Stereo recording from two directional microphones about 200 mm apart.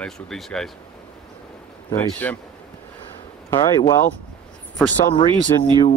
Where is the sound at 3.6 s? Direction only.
20° left (ahead or behind).